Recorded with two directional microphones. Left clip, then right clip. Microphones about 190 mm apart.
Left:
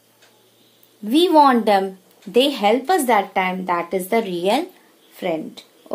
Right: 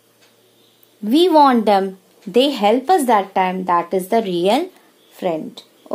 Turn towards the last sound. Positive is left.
turn(degrees=-30)  # may be behind; listen again after turning